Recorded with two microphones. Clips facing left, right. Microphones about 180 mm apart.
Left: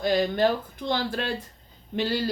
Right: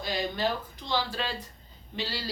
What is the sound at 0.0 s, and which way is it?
Speech, 55° left (ahead or behind).